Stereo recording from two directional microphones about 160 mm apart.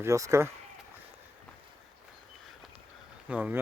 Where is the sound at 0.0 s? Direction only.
20° right (ahead or behind).